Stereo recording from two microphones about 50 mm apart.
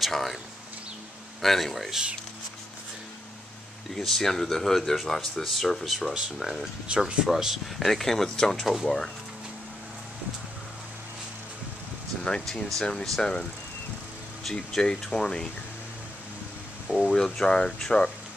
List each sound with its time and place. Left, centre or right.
0.0 s speech: centre
1.4 s speech: centre
3.9 s speech: centre
6.4 s speech: centre
6.9 s speech: right
7.2 s speech: centre
7.8 s speech: centre
12.2 s speech: centre
14.5 s speech: centre
16.9 s speech: centre